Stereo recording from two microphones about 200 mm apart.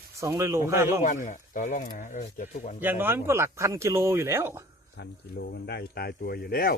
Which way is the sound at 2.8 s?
10° right (ahead or behind).